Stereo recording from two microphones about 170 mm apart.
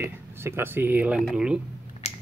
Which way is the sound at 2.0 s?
40° left (ahead or behind).